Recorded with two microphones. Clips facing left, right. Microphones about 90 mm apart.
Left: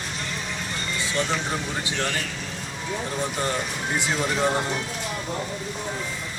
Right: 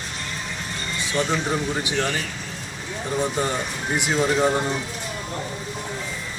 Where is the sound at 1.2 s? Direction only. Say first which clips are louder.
Right 4 dB; 20° right (ahead or behind).